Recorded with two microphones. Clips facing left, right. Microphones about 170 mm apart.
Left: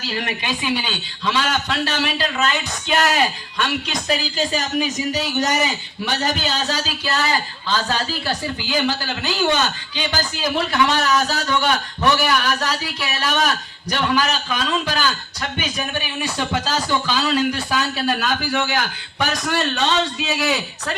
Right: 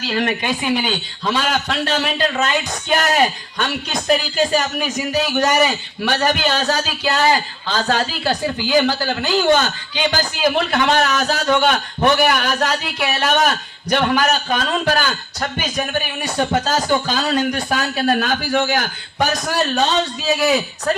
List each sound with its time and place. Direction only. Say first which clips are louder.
0.1 s a man's voice: right 6 dB; 50° right (ahead or behind)